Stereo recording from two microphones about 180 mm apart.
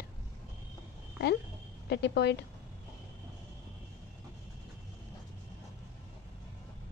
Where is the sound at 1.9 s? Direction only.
70° left (ahead or behind).